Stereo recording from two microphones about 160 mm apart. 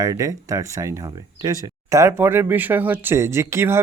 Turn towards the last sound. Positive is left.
turn(degrees=-15)  # may be behind; listen again after turning